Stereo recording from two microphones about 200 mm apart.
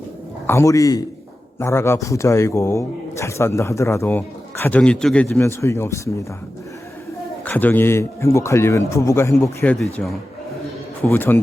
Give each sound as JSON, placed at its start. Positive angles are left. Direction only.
{"t": 0.4, "sound": "speech", "side_deg": 15}
{"t": 7.4, "sound": "speech", "side_deg": 10}
{"t": 9.7, "sound": "speech", "side_deg": 0}